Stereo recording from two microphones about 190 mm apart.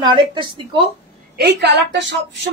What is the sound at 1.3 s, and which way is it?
Speech, 60° right (ahead or behind).